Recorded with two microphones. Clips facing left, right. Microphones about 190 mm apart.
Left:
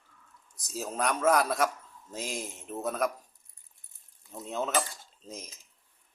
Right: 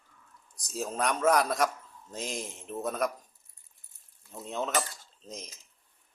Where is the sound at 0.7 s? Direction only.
Centre (ahead or behind).